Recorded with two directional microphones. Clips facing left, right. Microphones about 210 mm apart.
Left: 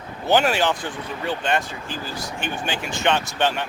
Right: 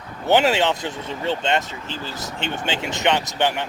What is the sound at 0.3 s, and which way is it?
Speech, 20° right (ahead or behind).